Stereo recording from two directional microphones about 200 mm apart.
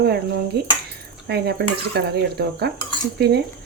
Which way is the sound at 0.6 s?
55° right (ahead or behind).